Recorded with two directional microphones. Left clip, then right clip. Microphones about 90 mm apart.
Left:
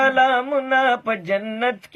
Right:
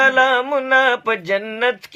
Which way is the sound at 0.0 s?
25° right (ahead or behind).